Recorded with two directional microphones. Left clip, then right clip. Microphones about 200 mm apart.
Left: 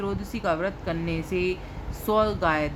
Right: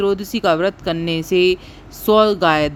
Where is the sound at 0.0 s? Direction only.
35° right (ahead or behind).